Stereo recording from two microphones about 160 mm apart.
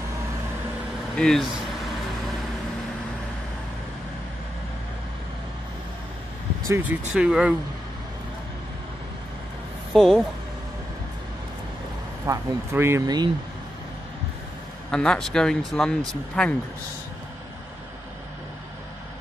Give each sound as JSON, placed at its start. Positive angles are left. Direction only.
{"t": 1.1, "sound": "speech", "side_deg": 5}
{"t": 6.7, "sound": "speech", "side_deg": -10}
{"t": 9.9, "sound": "speech", "side_deg": 0}
{"t": 12.3, "sound": "speech", "side_deg": -15}
{"t": 14.9, "sound": "speech", "side_deg": 5}